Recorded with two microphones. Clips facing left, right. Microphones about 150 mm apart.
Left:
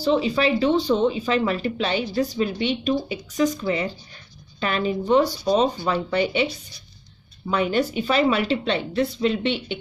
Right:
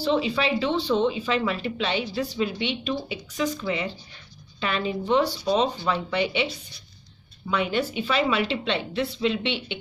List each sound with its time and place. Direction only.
0.0 s speech: 40° left (ahead or behind)
7.5 s speech: 45° left (ahead or behind)